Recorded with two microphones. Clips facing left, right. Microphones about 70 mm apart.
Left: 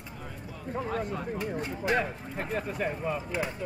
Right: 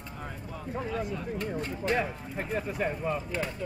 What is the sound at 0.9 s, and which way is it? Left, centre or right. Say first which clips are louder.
Speech: left 1 dB; left.